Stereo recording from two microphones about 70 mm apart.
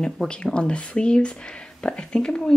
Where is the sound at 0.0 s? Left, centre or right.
Centre.